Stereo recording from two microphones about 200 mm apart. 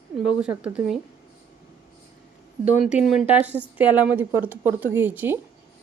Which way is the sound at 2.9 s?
35° left (ahead or behind).